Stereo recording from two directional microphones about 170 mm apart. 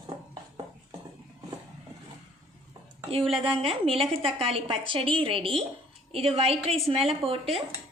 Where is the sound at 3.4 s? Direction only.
30° right (ahead or behind).